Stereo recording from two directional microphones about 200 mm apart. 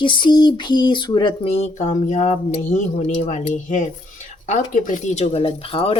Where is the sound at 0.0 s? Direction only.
25° left (ahead or behind).